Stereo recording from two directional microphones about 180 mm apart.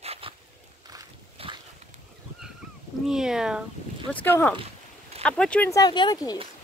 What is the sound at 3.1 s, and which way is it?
Speech, 5° right (ahead or behind).